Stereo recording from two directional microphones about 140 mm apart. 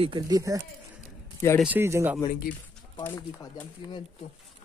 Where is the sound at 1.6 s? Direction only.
15° right (ahead or behind).